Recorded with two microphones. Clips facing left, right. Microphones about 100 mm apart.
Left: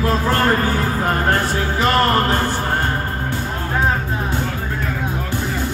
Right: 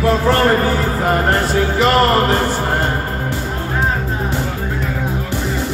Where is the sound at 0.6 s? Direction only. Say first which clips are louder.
Right 3 dB; 15° right (ahead or behind).